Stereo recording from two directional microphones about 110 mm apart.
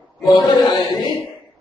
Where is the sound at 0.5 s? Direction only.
40° left (ahead or behind).